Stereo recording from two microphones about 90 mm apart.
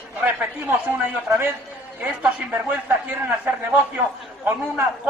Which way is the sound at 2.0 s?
10° right (ahead or behind).